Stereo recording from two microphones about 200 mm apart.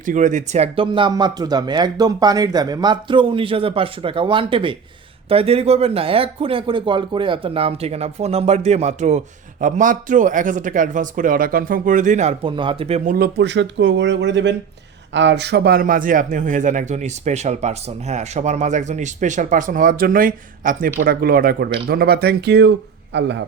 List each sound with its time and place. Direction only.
0.0 s speech: 40° right (ahead or behind)
13.1 s speech: 50° right (ahead or behind)